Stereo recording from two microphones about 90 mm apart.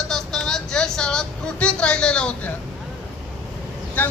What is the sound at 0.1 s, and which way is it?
Vehicle, 5° left (ahead or behind).